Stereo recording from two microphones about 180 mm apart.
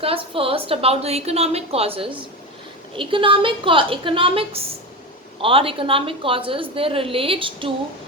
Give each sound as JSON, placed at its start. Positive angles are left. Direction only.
{"t": 0.0, "sound": "a woman's voice", "side_deg": -30}